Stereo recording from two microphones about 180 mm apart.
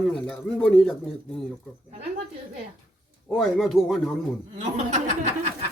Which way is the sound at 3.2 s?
5° left (ahead or behind).